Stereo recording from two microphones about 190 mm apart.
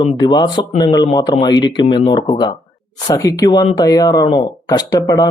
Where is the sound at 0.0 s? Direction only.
25° left (ahead or behind).